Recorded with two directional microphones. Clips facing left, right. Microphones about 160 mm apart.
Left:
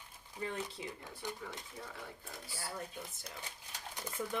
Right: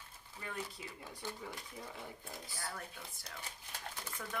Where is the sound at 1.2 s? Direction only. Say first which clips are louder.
Left 1 dB; 20° left (ahead or behind).